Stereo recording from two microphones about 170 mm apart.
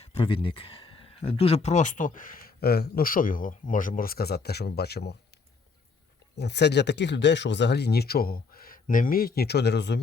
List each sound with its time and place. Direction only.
0.3 s speech: 30° left (ahead or behind); by 5.1 s 70° left (ahead or behind)
6.3 s speech: 90° left